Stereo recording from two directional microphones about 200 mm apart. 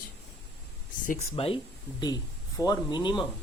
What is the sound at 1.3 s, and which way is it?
Speech, 30° left (ahead or behind).